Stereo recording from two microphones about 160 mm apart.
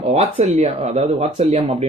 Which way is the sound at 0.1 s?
40° right (ahead or behind).